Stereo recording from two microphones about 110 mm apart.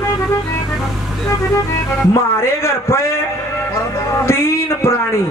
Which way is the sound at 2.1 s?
25° left (ahead or behind).